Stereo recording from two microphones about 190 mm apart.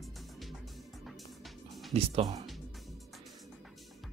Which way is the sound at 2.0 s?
30° right (ahead or behind).